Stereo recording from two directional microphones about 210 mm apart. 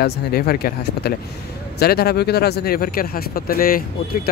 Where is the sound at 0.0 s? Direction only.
45° left (ahead or behind).